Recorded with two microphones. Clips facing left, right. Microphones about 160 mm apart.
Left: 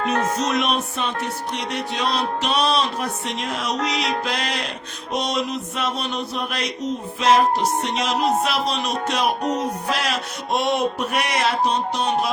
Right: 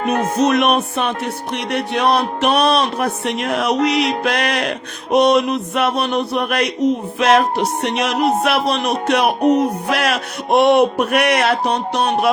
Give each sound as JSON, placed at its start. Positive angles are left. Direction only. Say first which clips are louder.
{"t": 0.0, "sound": "speech", "louder": "right 5 dB", "side_deg": -55}